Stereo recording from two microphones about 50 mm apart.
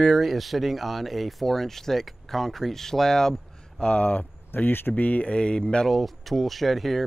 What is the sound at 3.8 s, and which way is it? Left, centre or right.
Speech, left.